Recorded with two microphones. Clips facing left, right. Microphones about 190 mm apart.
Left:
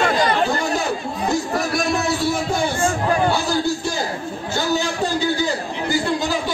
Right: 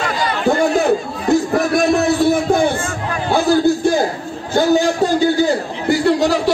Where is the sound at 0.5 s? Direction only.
55° right (ahead or behind).